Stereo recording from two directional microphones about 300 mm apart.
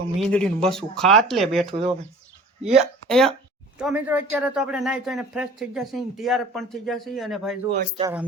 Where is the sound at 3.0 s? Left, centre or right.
Centre.